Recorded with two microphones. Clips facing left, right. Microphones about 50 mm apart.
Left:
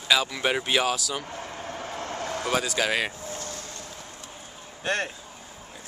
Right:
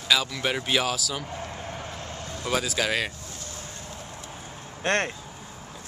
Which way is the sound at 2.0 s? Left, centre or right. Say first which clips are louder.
Left 5 dB; left.